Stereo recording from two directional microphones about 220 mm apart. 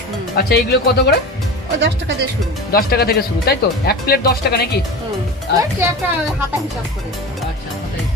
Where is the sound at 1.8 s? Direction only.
55° right (ahead or behind).